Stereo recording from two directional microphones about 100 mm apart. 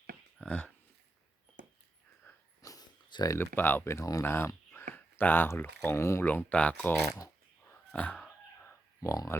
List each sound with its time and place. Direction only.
0.3 s a sound: 10° left (ahead or behind)
2.3 s dog: 25° left (ahead or behind)
2.6 s a sound: 40° left (ahead or behind)
3.3 s speech: 20° left (ahead or behind)
6.2 s speech: 15° left (ahead or behind)
7.0 s speech: 30° left (ahead or behind)
7.7 s whispering: 15° left (ahead or behind)
9.0 s speech: 30° left (ahead or behind)